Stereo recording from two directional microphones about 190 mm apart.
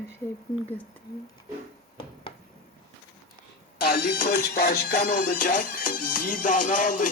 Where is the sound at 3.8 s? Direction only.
55° left (ahead or behind).